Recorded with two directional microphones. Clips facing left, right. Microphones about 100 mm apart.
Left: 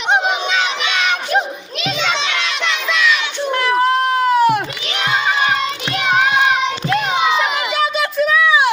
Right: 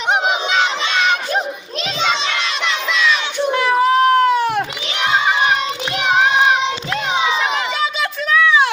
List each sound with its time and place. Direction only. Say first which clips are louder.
3.5 s baby cry: right 1 dB; centre (ahead or behind)
6.0 s child singing: even; 15° right (ahead or behind)
7.8 s a sound: left 4 dB; 5° left (ahead or behind)